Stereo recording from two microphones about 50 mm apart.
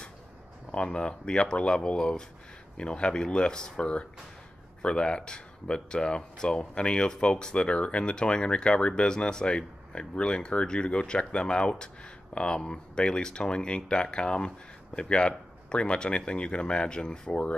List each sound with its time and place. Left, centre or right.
0.8 s speech: centre